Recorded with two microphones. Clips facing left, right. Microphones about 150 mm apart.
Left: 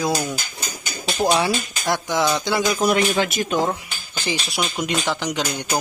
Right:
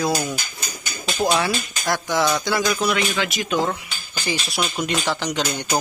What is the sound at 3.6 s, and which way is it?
Cutlery, 20° left (ahead or behind).